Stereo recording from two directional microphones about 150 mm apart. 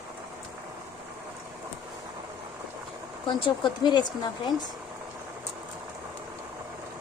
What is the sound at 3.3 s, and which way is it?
Speech, 35° left (ahead or behind).